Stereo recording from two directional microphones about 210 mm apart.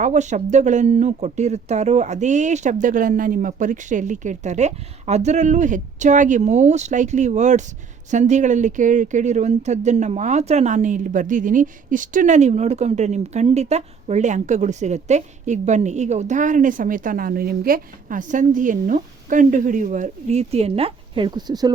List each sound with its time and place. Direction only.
0.0 s speech: 35° right (ahead or behind); by 21.7 s 20° right (ahead or behind)